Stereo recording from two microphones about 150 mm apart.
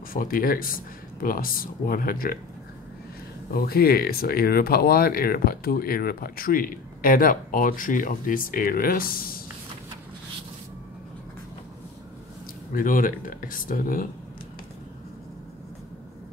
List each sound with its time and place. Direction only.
0.1 s speech: 70° left (ahead or behind)
3.5 s speech: 90° left
12.7 s speech: 65° left (ahead or behind)